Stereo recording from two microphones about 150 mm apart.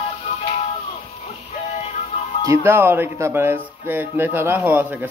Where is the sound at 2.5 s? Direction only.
15° right (ahead or behind).